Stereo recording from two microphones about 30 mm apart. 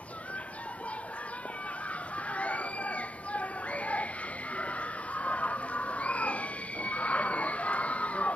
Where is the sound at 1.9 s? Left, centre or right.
Left.